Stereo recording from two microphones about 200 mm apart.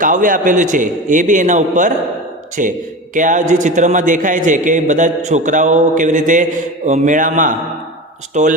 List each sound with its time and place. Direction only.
0.0 s a man's voice: 40° right (ahead or behind)